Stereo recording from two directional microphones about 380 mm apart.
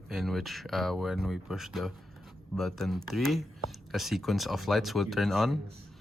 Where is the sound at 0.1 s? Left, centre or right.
Centre.